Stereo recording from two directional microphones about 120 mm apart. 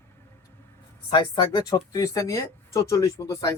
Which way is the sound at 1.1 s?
40° left (ahead or behind).